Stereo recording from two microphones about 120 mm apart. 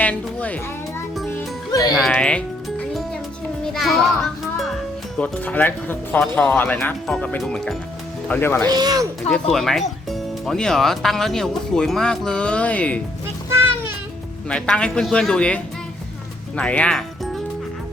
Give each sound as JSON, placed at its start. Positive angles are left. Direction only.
{"t": 0.0, "sound": "speech", "side_deg": 10}
{"t": 1.9, "sound": "music", "side_deg": 5}
{"t": 3.7, "sound": "a child's voice", "side_deg": 5}
{"t": 8.3, "sound": "speech", "side_deg": 15}
{"t": 8.6, "sound": "speech", "side_deg": -35}
{"t": 9.3, "sound": "speech", "side_deg": 5}
{"t": 13.5, "sound": "music", "side_deg": -20}
{"t": 14.5, "sound": "speech", "side_deg": 10}